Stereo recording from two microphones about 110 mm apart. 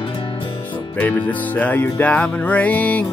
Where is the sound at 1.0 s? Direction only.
15° left (ahead or behind).